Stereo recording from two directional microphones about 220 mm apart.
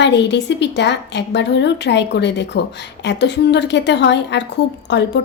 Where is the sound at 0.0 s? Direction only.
55° left (ahead or behind).